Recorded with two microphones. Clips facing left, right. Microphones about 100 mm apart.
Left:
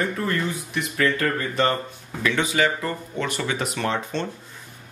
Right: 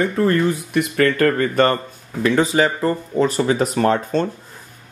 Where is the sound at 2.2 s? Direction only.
35° right (ahead or behind).